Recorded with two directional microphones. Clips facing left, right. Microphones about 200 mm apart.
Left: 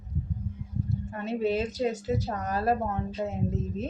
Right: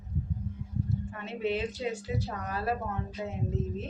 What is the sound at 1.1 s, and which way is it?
A woman's voice, 40° left (ahead or behind).